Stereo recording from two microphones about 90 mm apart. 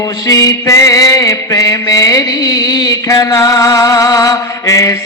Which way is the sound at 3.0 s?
35° left (ahead or behind).